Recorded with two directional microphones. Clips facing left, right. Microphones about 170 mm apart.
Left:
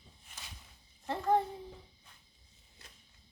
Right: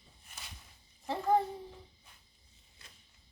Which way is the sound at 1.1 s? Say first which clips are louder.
Right 1 dB; 5° right (ahead or behind).